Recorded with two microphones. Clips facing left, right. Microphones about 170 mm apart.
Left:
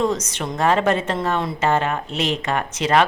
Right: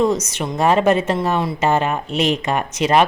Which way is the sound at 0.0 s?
10° right (ahead or behind).